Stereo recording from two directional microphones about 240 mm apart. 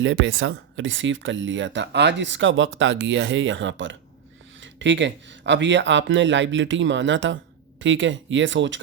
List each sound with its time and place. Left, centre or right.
0.0 s speech: right